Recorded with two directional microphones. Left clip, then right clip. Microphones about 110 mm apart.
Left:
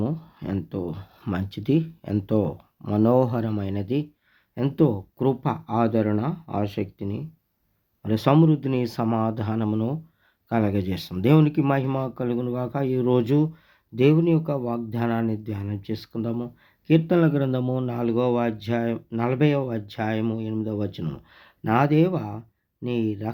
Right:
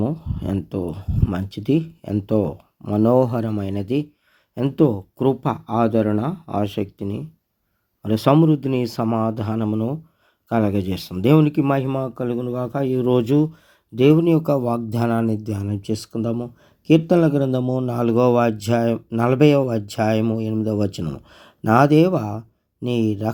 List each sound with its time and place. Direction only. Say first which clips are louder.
0.0 s a sound: right 5 dB; 20° right (ahead or behind)
0.5 s speech: right 4 dB; 20° right (ahead or behind); by 6.6 s 35° right (ahead or behind)
6.6 s speech: right 4 dB; 50° right (ahead or behind); by 9.6 s 30° right (ahead or behind)
9.6 s speech: right 3 dB; 20° right (ahead or behind)
10.5 s speech: right 4 dB; 35° right (ahead or behind)
11.9 s a man's voice: right 3 dB; 15° right (ahead or behind)
12.8 s speech: right 3 dB; 30° right (ahead or behind); by 14.3 s 45° right (ahead or behind)
14.3 s speech: right 6 dB; 75° right (ahead or behind)
14.9 s speech: right 5 dB; 50° right (ahead or behind)
17.2 s speech: right 4 dB; 25° right (ahead or behind)
17.6 s a man's voice: right 4 dB; 15° right (ahead or behind)
17.8 s speech: right 7 dB; 50° right (ahead or behind)
21.0 s speech: right 4 dB; 45° right (ahead or behind)